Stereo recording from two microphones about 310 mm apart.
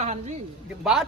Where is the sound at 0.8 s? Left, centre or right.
Centre.